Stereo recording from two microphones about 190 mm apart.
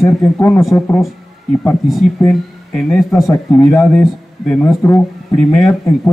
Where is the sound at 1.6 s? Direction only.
Centre (ahead or behind).